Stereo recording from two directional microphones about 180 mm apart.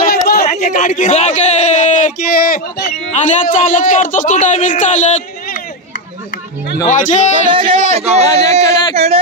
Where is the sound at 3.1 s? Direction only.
40° left (ahead or behind).